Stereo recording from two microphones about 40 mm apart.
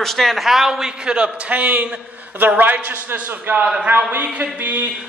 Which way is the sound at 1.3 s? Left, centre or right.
Right.